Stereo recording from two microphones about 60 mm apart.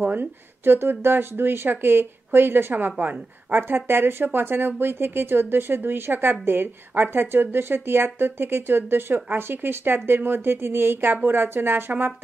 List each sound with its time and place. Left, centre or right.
0.0 s speech: right